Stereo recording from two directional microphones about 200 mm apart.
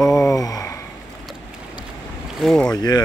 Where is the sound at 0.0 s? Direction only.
Centre (ahead or behind).